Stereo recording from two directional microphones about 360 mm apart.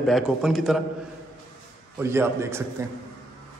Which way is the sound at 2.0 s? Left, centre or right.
Centre.